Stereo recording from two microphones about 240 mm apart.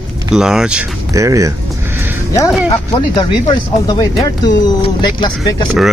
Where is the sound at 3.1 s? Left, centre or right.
Centre.